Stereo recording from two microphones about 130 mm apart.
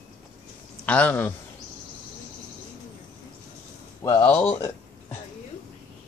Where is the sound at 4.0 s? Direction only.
35° left (ahead or behind).